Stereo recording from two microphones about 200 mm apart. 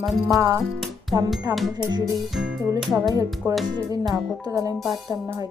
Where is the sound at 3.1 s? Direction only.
15° right (ahead or behind).